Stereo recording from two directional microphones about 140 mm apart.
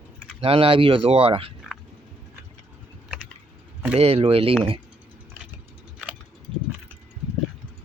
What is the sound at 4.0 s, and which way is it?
Speech, 45° right (ahead or behind).